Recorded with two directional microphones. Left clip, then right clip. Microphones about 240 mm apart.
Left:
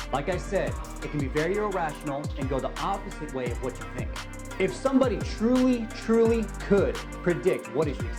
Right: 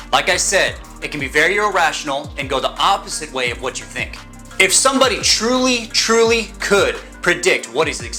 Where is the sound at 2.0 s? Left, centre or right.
Right.